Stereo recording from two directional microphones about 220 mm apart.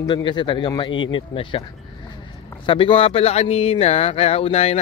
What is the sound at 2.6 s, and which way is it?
Speech, 25° left (ahead or behind).